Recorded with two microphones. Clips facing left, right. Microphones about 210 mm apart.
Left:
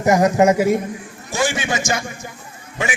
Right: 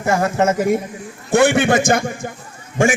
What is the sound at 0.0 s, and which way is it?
Speech, 15° left (ahead or behind).